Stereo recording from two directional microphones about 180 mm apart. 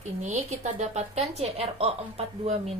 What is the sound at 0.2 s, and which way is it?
A woman's voice, 40° right (ahead or behind).